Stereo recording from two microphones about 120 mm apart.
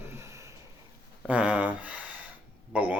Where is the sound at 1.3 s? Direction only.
10° right (ahead or behind).